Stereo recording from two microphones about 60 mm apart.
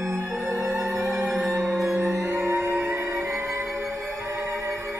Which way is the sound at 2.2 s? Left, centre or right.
Right.